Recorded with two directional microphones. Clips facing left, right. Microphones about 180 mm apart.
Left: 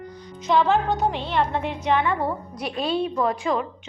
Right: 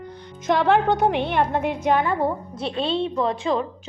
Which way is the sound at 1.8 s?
40° right (ahead or behind).